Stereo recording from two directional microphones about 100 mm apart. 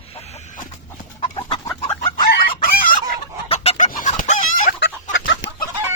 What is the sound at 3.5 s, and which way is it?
Chicken, 90° left.